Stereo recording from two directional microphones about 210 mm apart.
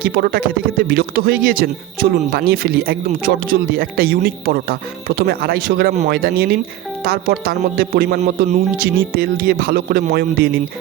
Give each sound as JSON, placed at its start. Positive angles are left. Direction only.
{"t": 0.0, "sound": "speech", "side_deg": -45}